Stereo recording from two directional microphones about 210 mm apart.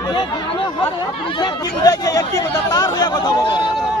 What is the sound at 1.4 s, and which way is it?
Speech, 15° left (ahead or behind).